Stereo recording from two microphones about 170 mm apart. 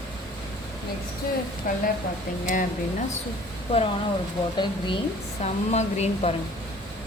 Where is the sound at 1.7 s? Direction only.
55° left (ahead or behind).